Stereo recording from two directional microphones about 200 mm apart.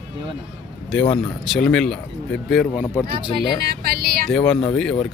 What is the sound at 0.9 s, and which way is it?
Speech, 5° left (ahead or behind).